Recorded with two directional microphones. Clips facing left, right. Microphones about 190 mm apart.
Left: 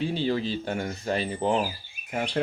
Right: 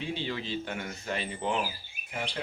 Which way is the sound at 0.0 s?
35° left (ahead or behind).